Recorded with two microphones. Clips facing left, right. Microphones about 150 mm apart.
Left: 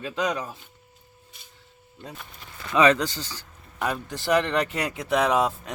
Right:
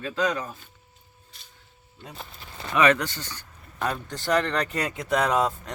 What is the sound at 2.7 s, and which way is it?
Speech, 25° left (ahead or behind).